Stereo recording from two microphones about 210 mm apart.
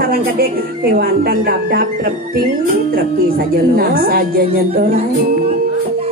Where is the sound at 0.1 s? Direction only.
45° right (ahead or behind).